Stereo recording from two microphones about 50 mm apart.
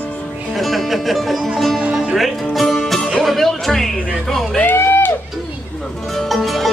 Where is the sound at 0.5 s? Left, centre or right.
Centre.